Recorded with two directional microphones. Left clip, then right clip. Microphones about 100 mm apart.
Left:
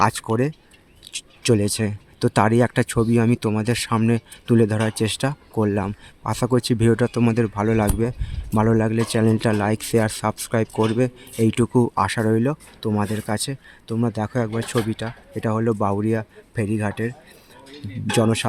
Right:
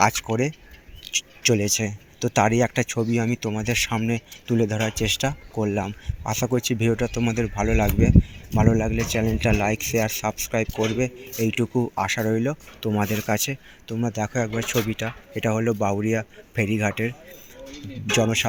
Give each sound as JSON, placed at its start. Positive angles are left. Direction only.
{"t": 0.3, "sound": "speech", "side_deg": 45}
{"t": 1.5, "sound": "speech", "side_deg": 55}
{"t": 8.5, "sound": "speech", "side_deg": 55}
{"t": 9.4, "sound": "speech", "side_deg": 40}
{"t": 11.9, "sound": "speech", "side_deg": 50}
{"t": 13.0, "sound": "speech", "side_deg": 25}
{"t": 13.9, "sound": "speech", "side_deg": 45}
{"t": 15.0, "sound": "speech", "side_deg": 30}
{"t": 18.1, "sound": "speech", "side_deg": 50}